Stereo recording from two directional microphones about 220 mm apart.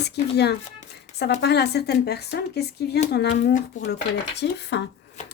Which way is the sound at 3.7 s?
35° left (ahead or behind).